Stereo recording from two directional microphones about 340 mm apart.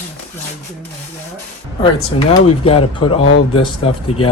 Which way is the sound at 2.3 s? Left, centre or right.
Centre.